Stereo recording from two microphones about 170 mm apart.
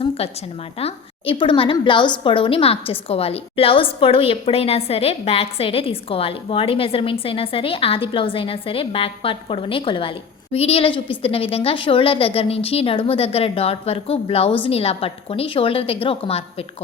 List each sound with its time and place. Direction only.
0.2 s a woman's voice: 35° left (ahead or behind)